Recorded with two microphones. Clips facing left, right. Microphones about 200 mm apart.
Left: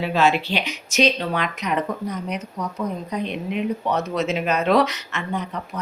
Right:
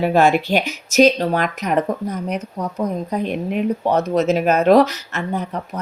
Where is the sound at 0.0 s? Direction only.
50° right (ahead or behind).